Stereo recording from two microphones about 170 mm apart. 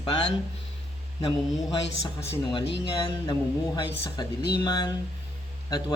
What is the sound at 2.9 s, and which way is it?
Speech, 30° left (ahead or behind).